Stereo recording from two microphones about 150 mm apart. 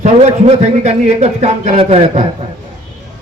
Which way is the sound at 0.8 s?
45° right (ahead or behind).